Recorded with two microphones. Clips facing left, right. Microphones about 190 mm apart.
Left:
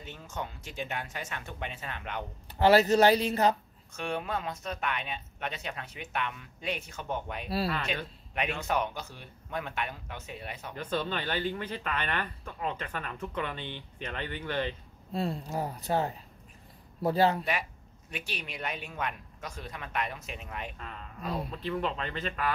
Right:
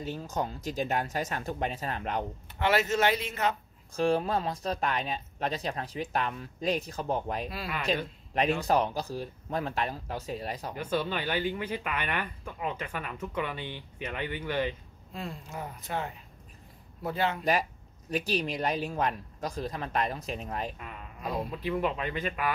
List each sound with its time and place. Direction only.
0.0 s speech: 35° right (ahead or behind)
2.6 s speech: 35° left (ahead or behind)
3.9 s speech: 35° right (ahead or behind)
7.4 s speech: 35° left (ahead or behind)
8.6 s speech: 35° right (ahead or behind)
10.8 s speech: 10° right (ahead or behind)
15.1 s speech: 35° left (ahead or behind)
18.1 s speech: 35° right (ahead or behind)
20.7 s speech: 10° right (ahead or behind)